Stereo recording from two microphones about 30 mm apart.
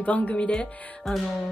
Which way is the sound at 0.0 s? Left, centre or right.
Left.